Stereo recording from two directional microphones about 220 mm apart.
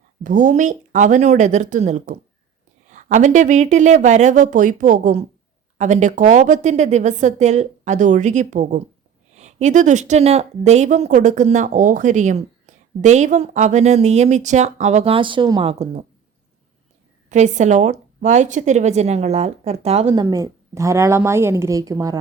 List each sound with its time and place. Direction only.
0.2 s speech: 35° right (ahead or behind)
17.2 s speech: 30° right (ahead or behind)
20.2 s a woman's voice: 15° right (ahead or behind)